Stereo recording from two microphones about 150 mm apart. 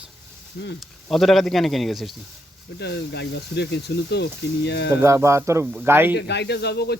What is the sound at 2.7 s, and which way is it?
Speech, 90° left.